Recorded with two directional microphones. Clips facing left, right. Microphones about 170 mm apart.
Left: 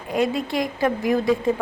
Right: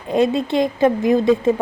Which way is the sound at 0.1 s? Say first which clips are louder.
Right 5 dB; 25° right (ahead or behind).